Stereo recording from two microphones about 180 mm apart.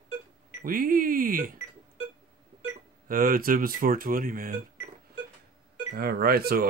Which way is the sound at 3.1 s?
50° right (ahead or behind).